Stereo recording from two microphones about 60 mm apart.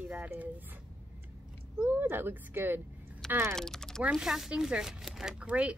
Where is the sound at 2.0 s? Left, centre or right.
Right.